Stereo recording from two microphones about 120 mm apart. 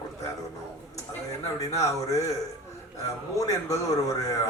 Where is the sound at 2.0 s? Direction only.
25° left (ahead or behind).